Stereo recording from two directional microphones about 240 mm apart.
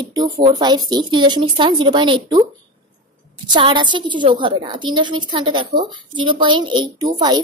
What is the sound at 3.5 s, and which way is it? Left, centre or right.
A woman's voice, centre.